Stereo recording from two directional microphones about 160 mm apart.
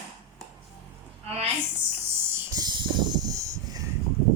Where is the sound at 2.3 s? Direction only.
15° right (ahead or behind).